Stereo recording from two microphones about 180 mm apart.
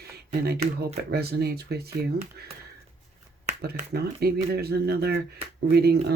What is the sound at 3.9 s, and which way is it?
Speech, 60° right (ahead or behind).